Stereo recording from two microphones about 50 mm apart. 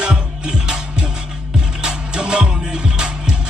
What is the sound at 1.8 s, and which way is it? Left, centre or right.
Music, centre.